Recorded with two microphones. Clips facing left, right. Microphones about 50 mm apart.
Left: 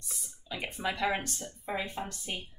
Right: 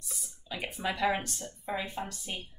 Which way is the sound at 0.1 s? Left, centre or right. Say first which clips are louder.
Even; centre.